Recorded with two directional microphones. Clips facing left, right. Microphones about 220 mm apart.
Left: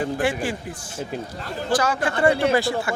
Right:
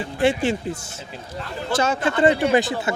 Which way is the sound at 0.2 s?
25° right (ahead or behind).